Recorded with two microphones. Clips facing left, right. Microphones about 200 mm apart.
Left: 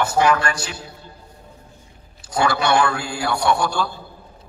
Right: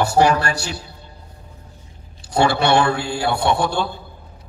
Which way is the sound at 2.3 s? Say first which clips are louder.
Right 3 dB; 30° right (ahead or behind).